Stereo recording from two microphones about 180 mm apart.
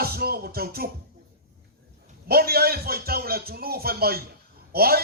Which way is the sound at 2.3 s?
60° right (ahead or behind).